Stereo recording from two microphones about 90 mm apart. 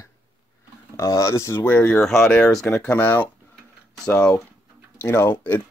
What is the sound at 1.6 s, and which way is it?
Speech, 20° left (ahead or behind).